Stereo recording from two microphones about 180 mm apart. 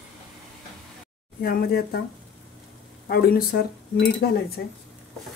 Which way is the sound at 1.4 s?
55° left (ahead or behind).